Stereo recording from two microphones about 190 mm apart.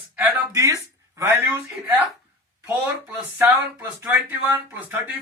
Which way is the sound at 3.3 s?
10° right (ahead or behind).